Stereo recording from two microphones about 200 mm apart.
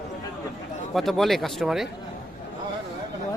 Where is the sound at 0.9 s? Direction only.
Centre (ahead or behind).